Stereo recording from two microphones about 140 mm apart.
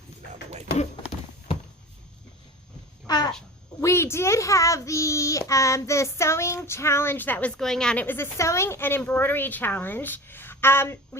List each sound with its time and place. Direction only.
3.1 s babbling: 30° left (ahead or behind)
3.8 s a child's voice: 20° left (ahead or behind)